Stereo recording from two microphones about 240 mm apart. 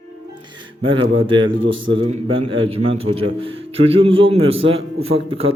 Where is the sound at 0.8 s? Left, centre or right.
Right.